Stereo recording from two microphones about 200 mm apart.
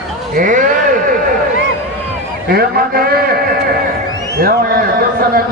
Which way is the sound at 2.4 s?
50° right (ahead or behind).